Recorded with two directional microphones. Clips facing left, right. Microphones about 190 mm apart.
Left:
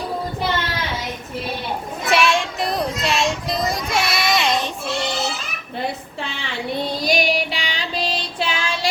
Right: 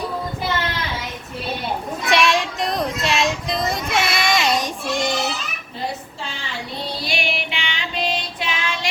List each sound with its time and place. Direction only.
2.0 s child singing: centre (ahead or behind)
4.6 s goat: 15° right (ahead or behind)
7.0 s female singing: 40° left (ahead or behind)